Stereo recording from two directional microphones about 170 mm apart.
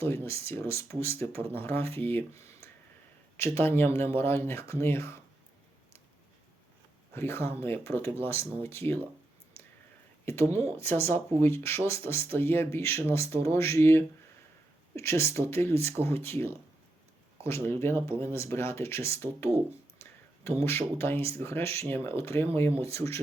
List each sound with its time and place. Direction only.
0.3 s speech: 15° left (ahead or behind)
7.1 s speech: 15° left (ahead or behind)
10.3 s speech: 15° left (ahead or behind)
17.4 s speech: 15° left (ahead or behind)
20.7 s speech: 15° left (ahead or behind)